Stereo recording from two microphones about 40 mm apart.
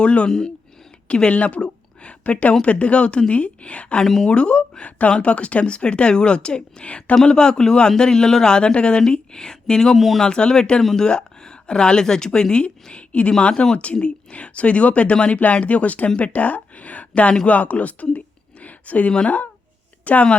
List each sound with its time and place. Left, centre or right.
0.0 s speech: left
0.3 s a woman's voice: centre; by 3.9 s left
4.0 s speech: centre
4.3 s speech: left
7.3 s speech: centre
9.9 s speech: centre
10.2 s speech: left
12.9 s a woman's voice: left
13.5 s speech: centre; by 18.2 s left
18.6 s a sound: left
20.1 s speech: left